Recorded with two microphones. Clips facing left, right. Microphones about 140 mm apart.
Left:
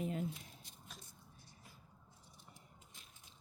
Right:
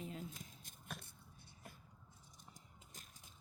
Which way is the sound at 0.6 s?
50° right (ahead or behind).